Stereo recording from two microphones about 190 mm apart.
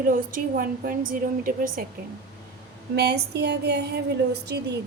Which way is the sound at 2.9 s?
60° right (ahead or behind).